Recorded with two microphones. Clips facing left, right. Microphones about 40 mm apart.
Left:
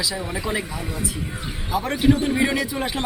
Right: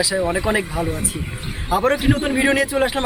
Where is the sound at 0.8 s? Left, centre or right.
Right.